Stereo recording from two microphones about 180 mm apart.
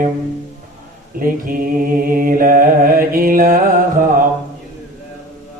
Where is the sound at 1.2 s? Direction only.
50° right (ahead or behind).